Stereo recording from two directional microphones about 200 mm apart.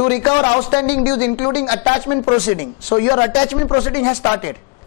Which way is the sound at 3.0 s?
25° left (ahead or behind).